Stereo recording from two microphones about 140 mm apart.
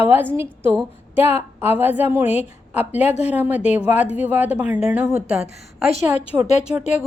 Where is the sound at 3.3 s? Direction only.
10° right (ahead or behind).